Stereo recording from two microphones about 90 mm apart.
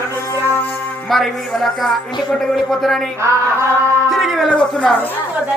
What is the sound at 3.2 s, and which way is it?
Chant, 30° right (ahead or behind).